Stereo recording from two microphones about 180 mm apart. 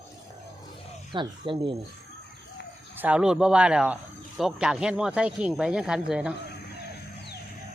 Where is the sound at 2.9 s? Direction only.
5° right (ahead or behind).